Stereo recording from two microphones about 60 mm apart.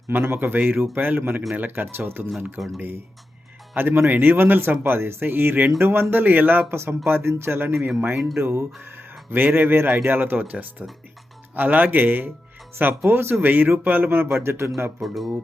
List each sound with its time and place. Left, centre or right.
0.1 s speech: right
2.6 s speech: centre
3.8 s speech: right
12.9 s a man's voice: right
15.0 s speech: centre